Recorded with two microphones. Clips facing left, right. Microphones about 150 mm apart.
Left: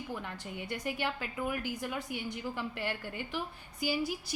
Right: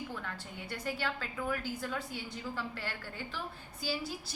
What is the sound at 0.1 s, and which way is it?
A woman's voice, 15° left (ahead or behind).